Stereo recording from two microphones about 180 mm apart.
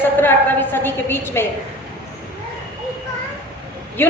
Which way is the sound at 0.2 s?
10° left (ahead or behind).